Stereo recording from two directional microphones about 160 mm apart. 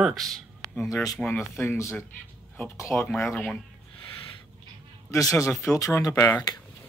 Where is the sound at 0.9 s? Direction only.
20° left (ahead or behind).